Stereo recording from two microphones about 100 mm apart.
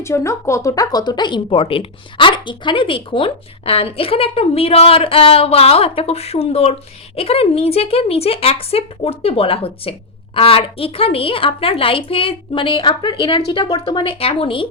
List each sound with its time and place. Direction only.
0.0 s a woman's voice: 30° left (ahead or behind); by 14.7 s 60° left (ahead or behind)